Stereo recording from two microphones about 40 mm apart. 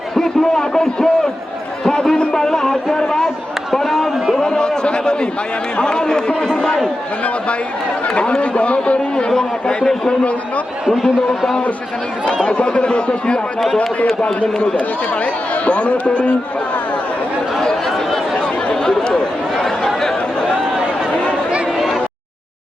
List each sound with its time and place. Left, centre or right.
0.1 s a man's voice: centre
3.2 s a sound: centre
4.4 s a man's voice: centre
8.0 s a man's voice: left
9.6 s a man's voice: centre
10.9 s a man's voice: centre
12.5 s a man's voice: left
15.2 s speech: left
17.6 s chatter: centre
19.5 s a sound: centre
21.8 s a sound: centre